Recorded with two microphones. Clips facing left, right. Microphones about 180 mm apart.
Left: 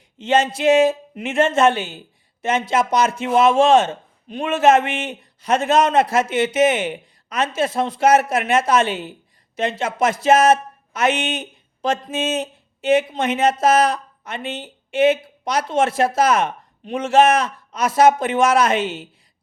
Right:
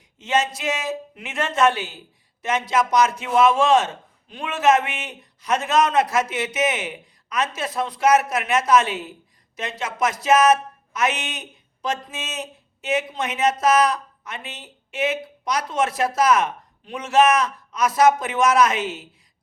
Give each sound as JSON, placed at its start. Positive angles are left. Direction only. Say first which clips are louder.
{"t": 0.2, "sound": "speech", "louder": "left 5 dB", "side_deg": 30}